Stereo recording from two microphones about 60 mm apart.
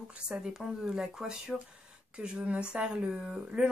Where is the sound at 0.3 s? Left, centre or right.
Centre.